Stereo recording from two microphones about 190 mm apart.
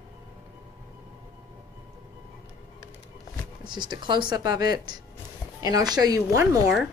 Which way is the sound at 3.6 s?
25° right (ahead or behind).